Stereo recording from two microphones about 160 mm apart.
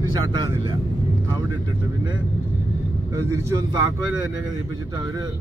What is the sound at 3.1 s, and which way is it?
Speech, 20° right (ahead or behind).